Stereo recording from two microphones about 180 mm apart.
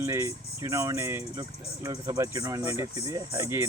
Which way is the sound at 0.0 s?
15° right (ahead or behind).